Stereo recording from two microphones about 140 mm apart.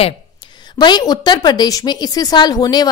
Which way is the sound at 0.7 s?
30° left (ahead or behind).